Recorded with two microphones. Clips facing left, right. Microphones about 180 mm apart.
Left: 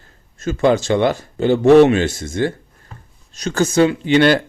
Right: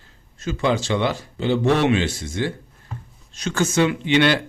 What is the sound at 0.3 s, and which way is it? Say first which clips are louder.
Speech: left 6 dB; 45° left (ahead or behind).